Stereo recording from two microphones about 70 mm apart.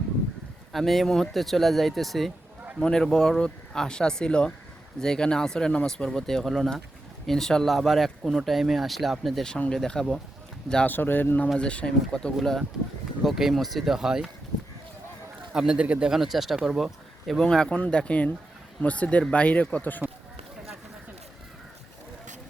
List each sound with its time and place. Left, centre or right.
0.7 s speech: centre
10.8 s speech: left
11.5 s speech: centre
12.4 s speech: centre
15.5 s speech: centre
17.4 s speech: centre